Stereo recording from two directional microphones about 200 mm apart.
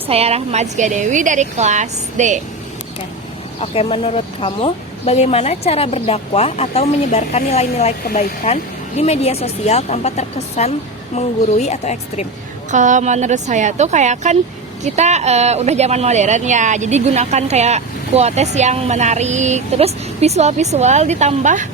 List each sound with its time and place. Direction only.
0.1 s speech: 30° right (ahead or behind)
3.6 s speech: 25° left (ahead or behind)
12.7 s speech: 40° right (ahead or behind)